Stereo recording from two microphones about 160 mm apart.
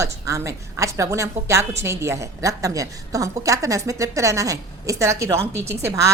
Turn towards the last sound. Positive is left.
turn(degrees=-15)  # may be behind; listen again after turning